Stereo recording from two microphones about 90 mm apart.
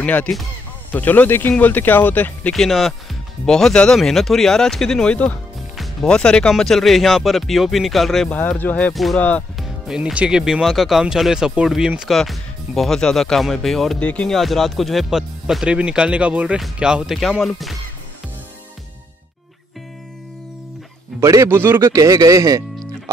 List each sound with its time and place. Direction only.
0.0 s speech: 15° left (ahead or behind)
2.5 s speech: centre (ahead or behind)
13.9 s speech: 15° left (ahead or behind)
14.3 s speech: centre (ahead or behind)
21.2 s a man's voice: 35° right (ahead or behind)
21.9 s a man's voice: 40° right (ahead or behind)